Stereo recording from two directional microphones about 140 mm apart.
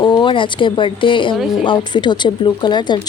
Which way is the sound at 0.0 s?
35° left (ahead or behind).